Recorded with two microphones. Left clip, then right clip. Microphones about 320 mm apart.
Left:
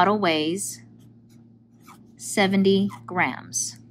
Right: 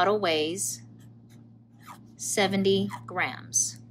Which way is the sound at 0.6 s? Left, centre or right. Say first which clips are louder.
Right 1 dB; centre.